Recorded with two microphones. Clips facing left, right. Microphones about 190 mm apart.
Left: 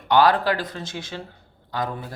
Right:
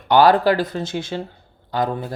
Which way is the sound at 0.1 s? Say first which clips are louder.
Right 4 dB; 30° right (ahead or behind).